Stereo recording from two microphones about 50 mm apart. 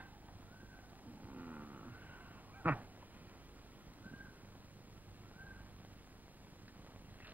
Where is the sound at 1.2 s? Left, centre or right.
Right.